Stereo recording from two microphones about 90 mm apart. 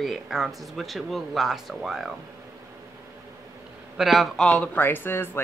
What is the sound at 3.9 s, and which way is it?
Speech, centre (ahead or behind).